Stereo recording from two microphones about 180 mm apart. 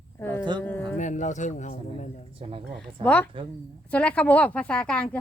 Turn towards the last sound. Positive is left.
turn(degrees=5)  # may be behind; listen again after turning